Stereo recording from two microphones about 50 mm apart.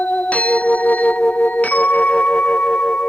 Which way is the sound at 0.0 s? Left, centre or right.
Left.